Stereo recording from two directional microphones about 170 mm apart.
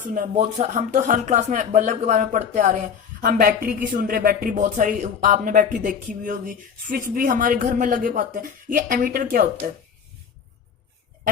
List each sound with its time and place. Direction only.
0.1 s speech: 45° right (ahead or behind)